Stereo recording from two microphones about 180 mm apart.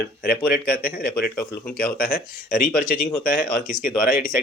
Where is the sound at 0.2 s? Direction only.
55° left (ahead or behind).